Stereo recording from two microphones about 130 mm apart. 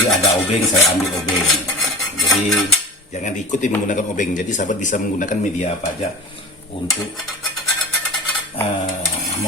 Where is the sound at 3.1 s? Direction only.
65° left (ahead or behind).